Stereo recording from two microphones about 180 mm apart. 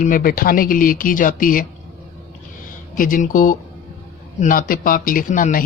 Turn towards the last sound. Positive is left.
turn(degrees=45)  # may be behind; listen again after turning